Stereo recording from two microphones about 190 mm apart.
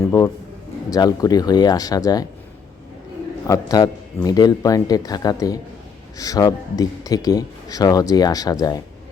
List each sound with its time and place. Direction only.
0.0 s a sound: 15° left (ahead or behind)
0.9 s speech: 20° left (ahead or behind)
3.4 s speech: 20° left (ahead or behind)